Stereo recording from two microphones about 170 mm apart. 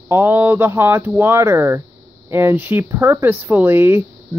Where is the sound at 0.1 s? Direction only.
15° right (ahead or behind).